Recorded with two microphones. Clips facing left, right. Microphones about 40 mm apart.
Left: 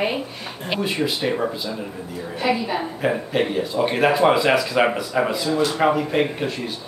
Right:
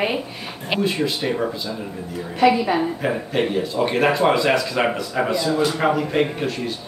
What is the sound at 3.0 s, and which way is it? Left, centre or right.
Speech, centre.